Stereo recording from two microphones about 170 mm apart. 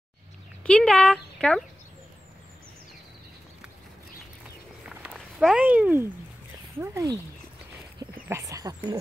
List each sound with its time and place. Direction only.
0.7 s speech: 5° left (ahead or behind)
5.1 s speech: 5° right (ahead or behind)
8.0 s dog: 20° right (ahead or behind)